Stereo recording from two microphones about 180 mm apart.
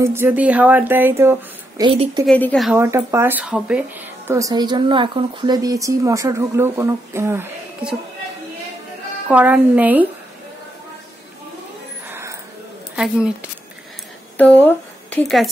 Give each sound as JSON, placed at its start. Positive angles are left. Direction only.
{"t": 0.0, "sound": "speech", "side_deg": -15}
{"t": 1.9, "sound": "a woman's voice", "side_deg": -30}
{"t": 2.2, "sound": "a woman's voice", "side_deg": 5}
{"t": 2.7, "sound": "speech", "side_deg": -15}
{"t": 9.3, "sound": "speech", "side_deg": -10}
{"t": 12.1, "sound": "a sound", "side_deg": -15}
{"t": 12.9, "sound": "a woman's voice", "side_deg": -5}
{"t": 14.3, "sound": "speech", "side_deg": 10}